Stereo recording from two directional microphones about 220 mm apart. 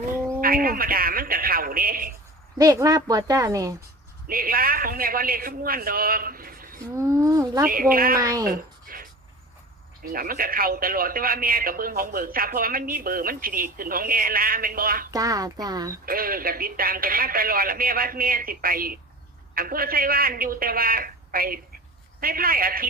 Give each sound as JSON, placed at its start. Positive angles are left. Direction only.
{"t": 0.4, "sound": "a man's voice", "side_deg": -40}
{"t": 2.6, "sound": "a woman's voice", "side_deg": -15}
{"t": 4.3, "sound": "a man's voice", "side_deg": -40}
{"t": 6.9, "sound": "a woman's voice", "side_deg": -15}
{"t": 7.7, "sound": "a man's voice", "side_deg": -40}
{"t": 8.2, "sound": "a woman's voice", "side_deg": -15}
{"t": 8.4, "sound": "writing", "side_deg": -40}
{"t": 10.1, "sound": "a man's voice", "side_deg": -40}
{"t": 15.1, "sound": "a woman's voice", "side_deg": -15}
{"t": 16.0, "sound": "a man's voice", "side_deg": -40}